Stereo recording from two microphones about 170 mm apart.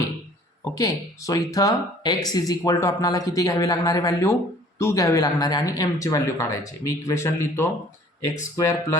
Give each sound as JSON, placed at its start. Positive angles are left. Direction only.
{"t": 0.6, "sound": "a man's voice", "side_deg": 20}